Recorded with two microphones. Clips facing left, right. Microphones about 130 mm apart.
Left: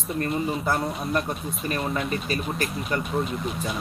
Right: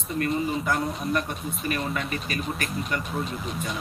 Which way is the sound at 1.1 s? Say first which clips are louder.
Left 2 dB; 35° left (ahead or behind).